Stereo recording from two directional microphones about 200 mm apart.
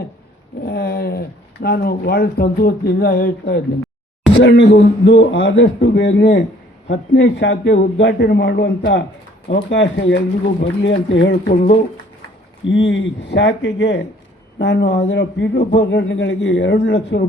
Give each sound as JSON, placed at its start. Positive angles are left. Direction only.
{"t": 0.6, "sound": "a sound", "side_deg": 50}
{"t": 1.6, "sound": "speech", "side_deg": 50}
{"t": 4.4, "sound": "a man's voice", "side_deg": 60}
{"t": 12.6, "sound": "a man's voice", "side_deg": 70}